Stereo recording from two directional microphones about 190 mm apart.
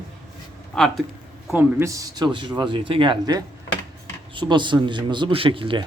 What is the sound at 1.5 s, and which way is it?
A man's voice, 10° right (ahead or behind).